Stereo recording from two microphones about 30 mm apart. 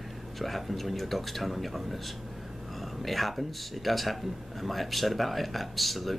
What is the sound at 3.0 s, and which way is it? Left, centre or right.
Speech, centre.